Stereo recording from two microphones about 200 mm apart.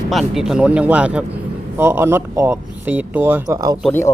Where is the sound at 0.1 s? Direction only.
Centre (ahead or behind); by 3.8 s 15° right (ahead or behind).